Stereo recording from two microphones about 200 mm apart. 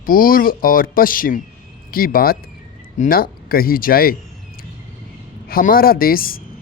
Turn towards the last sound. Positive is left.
turn(degrees=45)  # may be behind; listen again after turning